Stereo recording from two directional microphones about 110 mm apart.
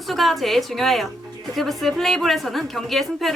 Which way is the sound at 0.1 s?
Centre (ahead or behind).